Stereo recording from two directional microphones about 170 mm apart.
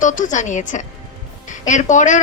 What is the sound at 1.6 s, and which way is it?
Speech, 45° left (ahead or behind).